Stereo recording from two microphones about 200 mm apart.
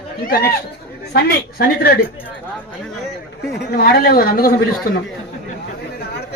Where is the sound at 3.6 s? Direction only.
50° left (ahead or behind).